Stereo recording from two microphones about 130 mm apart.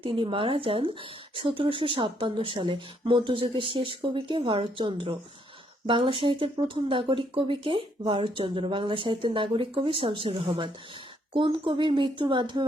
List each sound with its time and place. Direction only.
0.0 s speech: 40° right (ahead or behind)